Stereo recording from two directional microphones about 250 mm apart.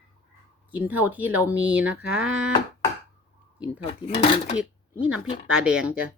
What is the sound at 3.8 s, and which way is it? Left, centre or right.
Speech, left.